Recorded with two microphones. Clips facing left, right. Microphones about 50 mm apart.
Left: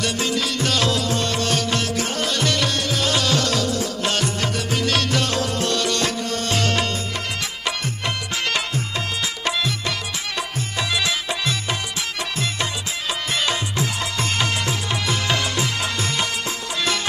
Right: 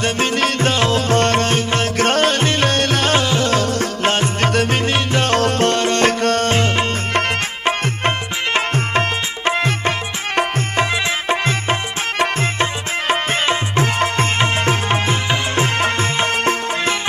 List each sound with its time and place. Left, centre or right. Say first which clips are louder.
0.0 s music: right 5 dB; right
1.5 s music: right 4 dB; right
2.0 s music: right 8 dB; right
3.2 s music: right 4 dB; right
4.5 s music: right 7 dB; right
4.8 s music: right 3 dB; right
5.3 s music: right 7 dB; right
6.2 s music: right 9 dB; right
6.5 s music: right 4 dB; right
7.6 s music: right 8 dB; right
9.4 s music: right 7 dB; right